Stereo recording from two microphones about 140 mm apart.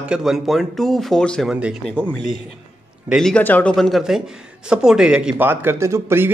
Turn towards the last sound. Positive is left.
turn(degrees=-15)  # may be behind; listen again after turning